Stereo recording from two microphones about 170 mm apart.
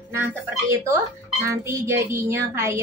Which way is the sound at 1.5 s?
15° right (ahead or behind).